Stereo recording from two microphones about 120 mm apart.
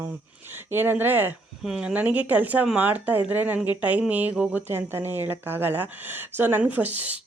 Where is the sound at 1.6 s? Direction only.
5° right (ahead or behind).